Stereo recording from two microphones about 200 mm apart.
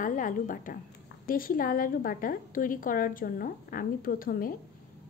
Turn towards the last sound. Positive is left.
turn(degrees=45)  # may be behind; listen again after turning